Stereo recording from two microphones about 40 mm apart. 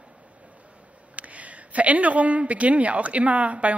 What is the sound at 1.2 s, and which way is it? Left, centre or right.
A woman's voice, right.